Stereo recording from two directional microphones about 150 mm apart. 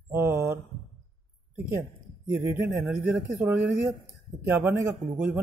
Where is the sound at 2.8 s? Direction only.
15° right (ahead or behind).